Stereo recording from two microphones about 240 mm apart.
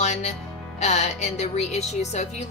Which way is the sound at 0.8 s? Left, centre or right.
Left.